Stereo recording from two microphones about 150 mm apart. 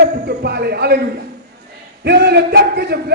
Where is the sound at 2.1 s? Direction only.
90° right.